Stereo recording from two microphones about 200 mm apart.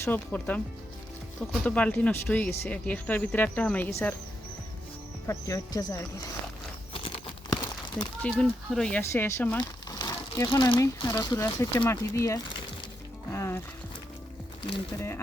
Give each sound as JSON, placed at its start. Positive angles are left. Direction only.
{"t": 0.0, "sound": "speech", "side_deg": 10}
{"t": 5.2, "sound": "speech", "side_deg": 15}
{"t": 6.9, "sound": "crumpling", "side_deg": 25}
{"t": 8.2, "sound": "speech", "side_deg": 5}
{"t": 9.6, "sound": "crumpling", "side_deg": 20}
{"t": 10.5, "sound": "speech", "side_deg": 25}
{"t": 13.3, "sound": "music", "side_deg": 15}